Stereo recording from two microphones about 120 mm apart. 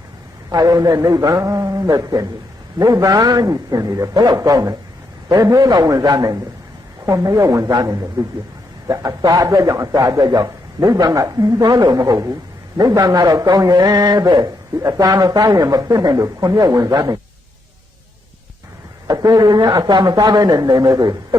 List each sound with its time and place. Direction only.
0.5 s a man's voice: 30° right (ahead or behind)
19.0 s a man's voice: 30° right (ahead or behind)